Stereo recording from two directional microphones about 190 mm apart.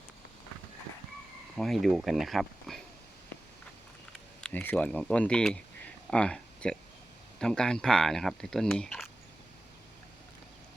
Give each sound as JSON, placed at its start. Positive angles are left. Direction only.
{"t": 1.5, "sound": "speech", "side_deg": 0}
{"t": 4.4, "sound": "speech", "side_deg": 5}